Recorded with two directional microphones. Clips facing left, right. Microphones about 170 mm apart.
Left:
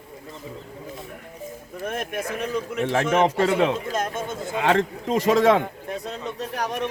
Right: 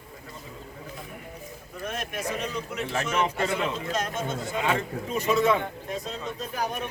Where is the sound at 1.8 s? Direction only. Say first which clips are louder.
Left 4 dB; 50° left (ahead or behind).